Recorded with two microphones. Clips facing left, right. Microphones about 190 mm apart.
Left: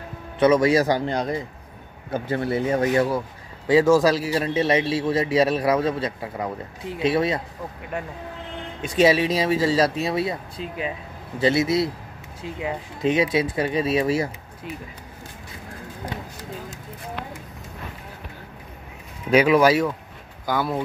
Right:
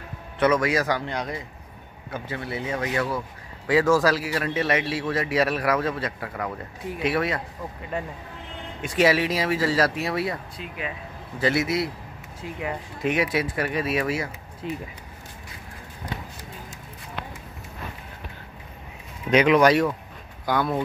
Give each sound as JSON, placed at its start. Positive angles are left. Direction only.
{"t": 0.4, "sound": "a man's voice", "side_deg": 25}
{"t": 2.1, "sound": "speech", "side_deg": 45}
{"t": 3.6, "sound": "a man's voice", "side_deg": 20}
{"t": 8.8, "sound": "a man's voice", "side_deg": 20}
{"t": 11.4, "sound": "a man's voice", "side_deg": 25}
{"t": 19.3, "sound": "speech", "side_deg": 5}